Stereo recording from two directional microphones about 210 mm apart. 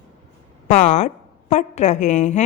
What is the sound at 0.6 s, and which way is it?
A woman's voice, 35° left (ahead or behind).